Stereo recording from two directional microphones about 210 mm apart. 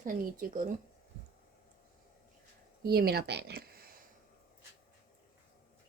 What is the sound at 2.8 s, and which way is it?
Speech, 50° right (ahead or behind).